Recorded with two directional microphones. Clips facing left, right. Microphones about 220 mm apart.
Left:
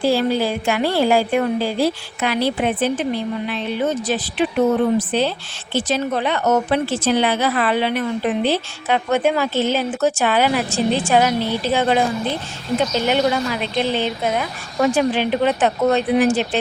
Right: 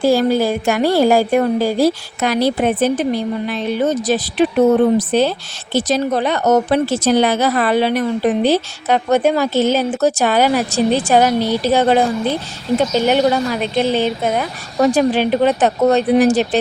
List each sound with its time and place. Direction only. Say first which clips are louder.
0.0 s a woman's voice: right 4 dB; 45° right (ahead or behind)
13.1 s a woman's voice: right 3 dB; 45° right (ahead or behind)